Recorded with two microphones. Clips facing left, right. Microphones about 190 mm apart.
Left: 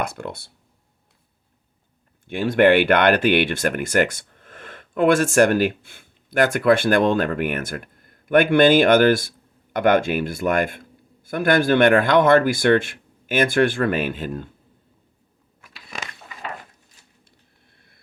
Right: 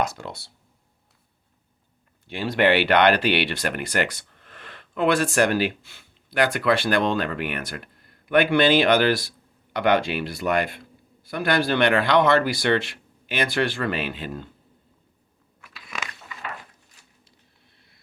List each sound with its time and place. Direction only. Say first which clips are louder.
0.0 s speech: even; 55° left (ahead or behind)
2.2 s speech: left 5 dB; 50° left (ahead or behind)
15.6 s dog: even; 35° left (ahead or behind)
17.7 s a sound: left 2 dB; 55° left (ahead or behind)